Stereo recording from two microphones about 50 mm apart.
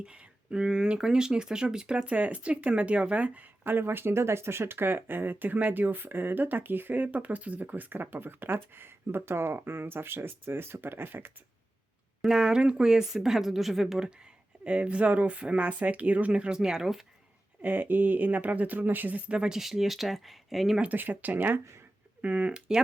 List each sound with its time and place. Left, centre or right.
0.0 s speech: right
2.0 s speech: right
12.2 s speech: centre
14.6 s speech: right
16.6 s speech: centre
17.6 s speech: right
19.3 s speech: centre
20.9 s speech: right
22.2 s speech: right